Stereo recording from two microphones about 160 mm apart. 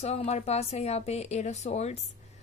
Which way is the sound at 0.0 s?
40° left (ahead or behind).